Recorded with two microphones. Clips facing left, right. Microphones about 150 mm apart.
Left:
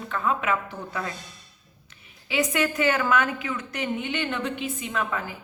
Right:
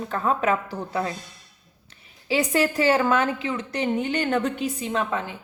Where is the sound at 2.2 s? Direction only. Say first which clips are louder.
Right 3 dB; 35° right (ahead or behind).